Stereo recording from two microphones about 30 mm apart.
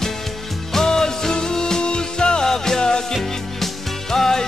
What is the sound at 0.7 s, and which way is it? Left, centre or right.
Music, centre.